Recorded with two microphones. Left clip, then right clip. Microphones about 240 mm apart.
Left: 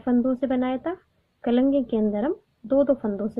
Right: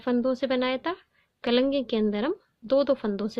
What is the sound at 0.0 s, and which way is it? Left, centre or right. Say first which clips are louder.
A woman's voice: left 2 dB; right.